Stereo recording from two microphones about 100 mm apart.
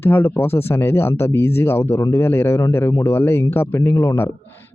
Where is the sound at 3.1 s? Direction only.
25° left (ahead or behind).